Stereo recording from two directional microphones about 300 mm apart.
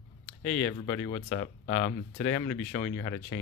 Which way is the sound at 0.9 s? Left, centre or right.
Centre.